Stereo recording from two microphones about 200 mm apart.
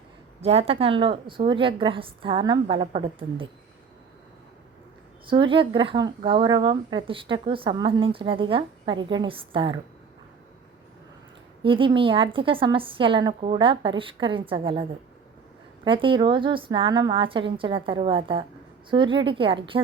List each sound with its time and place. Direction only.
0.4 s speech: 30° right (ahead or behind)
5.2 s speech: 25° right (ahead or behind)
11.6 s speech: 25° right (ahead or behind)